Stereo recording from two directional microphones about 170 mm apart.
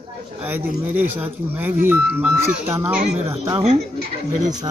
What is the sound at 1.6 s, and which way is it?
Speech, 10° right (ahead or behind).